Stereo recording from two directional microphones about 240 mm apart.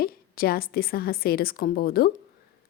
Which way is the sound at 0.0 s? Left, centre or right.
Left.